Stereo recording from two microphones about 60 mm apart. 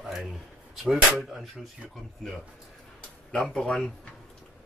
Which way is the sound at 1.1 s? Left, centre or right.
Centre.